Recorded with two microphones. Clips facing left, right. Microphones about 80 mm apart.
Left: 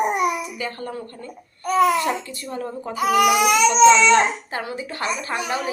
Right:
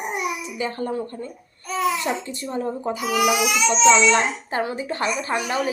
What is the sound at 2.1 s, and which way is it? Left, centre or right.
Speech, right.